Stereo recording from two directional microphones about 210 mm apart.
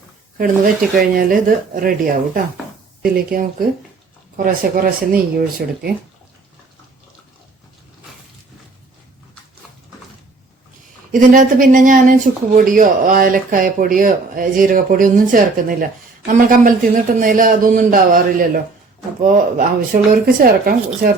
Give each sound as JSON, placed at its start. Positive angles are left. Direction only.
{"t": 0.3, "sound": "speech", "side_deg": -40}
{"t": 11.1, "sound": "speech", "side_deg": -40}